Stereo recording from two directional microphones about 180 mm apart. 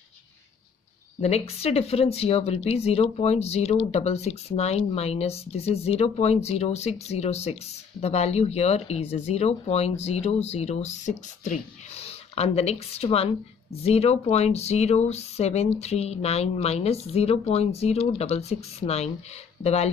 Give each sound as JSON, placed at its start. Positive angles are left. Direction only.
{"t": 1.2, "sound": "speech", "side_deg": 35}